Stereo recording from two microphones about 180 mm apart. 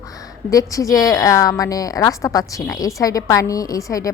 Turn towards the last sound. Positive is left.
turn(degrees=20)  # may be behind; listen again after turning